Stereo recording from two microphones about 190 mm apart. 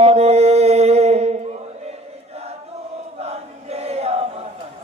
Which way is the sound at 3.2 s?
35° right (ahead or behind).